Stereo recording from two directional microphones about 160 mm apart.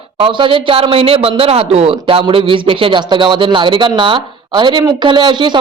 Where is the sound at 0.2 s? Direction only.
30° right (ahead or behind).